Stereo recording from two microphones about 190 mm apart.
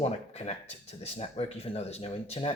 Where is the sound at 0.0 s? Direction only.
35° left (ahead or behind).